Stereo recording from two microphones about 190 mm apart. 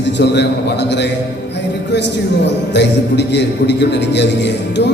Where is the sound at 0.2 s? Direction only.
65° left (ahead or behind).